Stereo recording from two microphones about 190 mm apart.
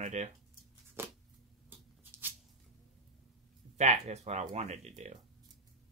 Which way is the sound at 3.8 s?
35° right (ahead or behind).